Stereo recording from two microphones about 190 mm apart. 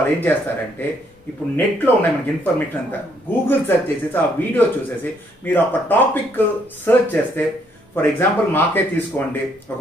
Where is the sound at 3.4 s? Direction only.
10° left (ahead or behind).